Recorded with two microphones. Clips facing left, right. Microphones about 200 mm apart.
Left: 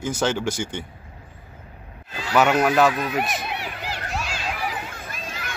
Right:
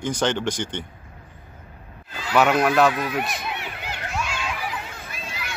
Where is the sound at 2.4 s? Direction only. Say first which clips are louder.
Even; centre (ahead or behind).